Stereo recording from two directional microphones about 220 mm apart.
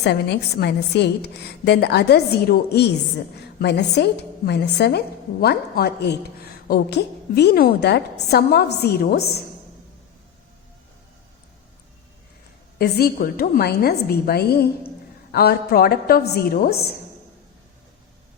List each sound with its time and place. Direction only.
0.0 s a woman's voice: 50° left (ahead or behind)
12.8 s a woman's voice: 45° left (ahead or behind)